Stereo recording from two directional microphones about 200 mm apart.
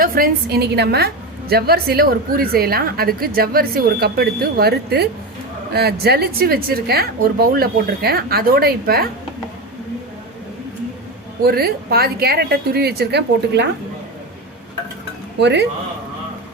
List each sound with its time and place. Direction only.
0.0 s a woman's voice: 45° right (ahead or behind)
11.4 s a woman's voice: 50° right (ahead or behind)
15.4 s a woman's voice: 60° right (ahead or behind)